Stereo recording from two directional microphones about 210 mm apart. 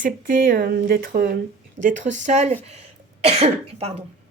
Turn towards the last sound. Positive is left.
turn(degrees=-30)  # may be behind; listen again after turning